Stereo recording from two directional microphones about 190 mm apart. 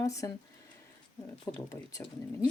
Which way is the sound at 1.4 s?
20° left (ahead or behind).